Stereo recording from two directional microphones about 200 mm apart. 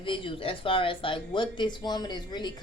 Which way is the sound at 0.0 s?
25° left (ahead or behind).